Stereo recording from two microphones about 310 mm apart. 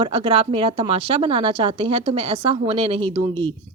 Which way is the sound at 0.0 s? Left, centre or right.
Centre.